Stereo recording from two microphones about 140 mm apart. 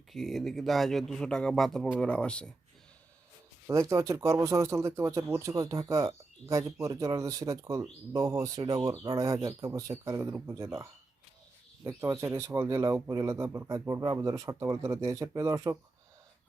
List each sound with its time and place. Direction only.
0.1 s speech: centre (ahead or behind)
3.7 s speech: 20° right (ahead or behind)